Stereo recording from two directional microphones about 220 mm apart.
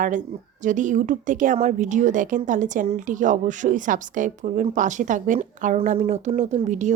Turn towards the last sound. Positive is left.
turn(degrees=-35)  # may be behind; listen again after turning